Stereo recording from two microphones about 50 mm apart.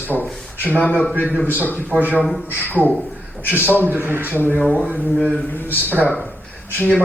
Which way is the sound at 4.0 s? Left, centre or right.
Right.